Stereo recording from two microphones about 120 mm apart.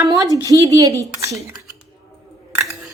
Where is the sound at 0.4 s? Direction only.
30° right (ahead or behind).